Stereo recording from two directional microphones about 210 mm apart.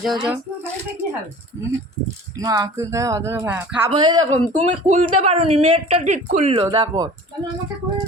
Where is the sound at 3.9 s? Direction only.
20° right (ahead or behind).